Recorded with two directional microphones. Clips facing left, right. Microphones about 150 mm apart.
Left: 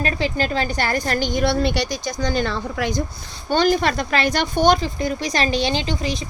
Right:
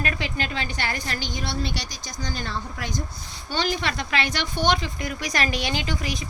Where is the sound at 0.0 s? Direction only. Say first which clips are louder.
Left 6 dB; 30° left (ahead or behind); by 3.0 s 75° left (ahead or behind).